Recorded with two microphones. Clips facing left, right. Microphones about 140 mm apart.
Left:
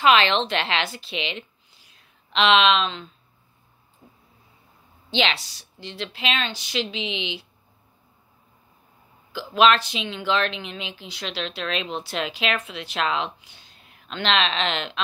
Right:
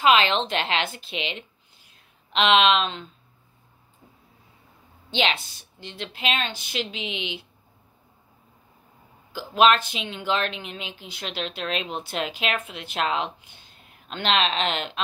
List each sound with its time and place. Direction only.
0.0 s a woman's voice: 40° right (ahead or behind)
5.1 s a woman's voice: 50° right (ahead or behind)
9.3 s a woman's voice: 45° right (ahead or behind)